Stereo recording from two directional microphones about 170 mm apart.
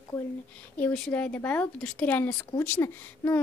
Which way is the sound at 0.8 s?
10° left (ahead or behind).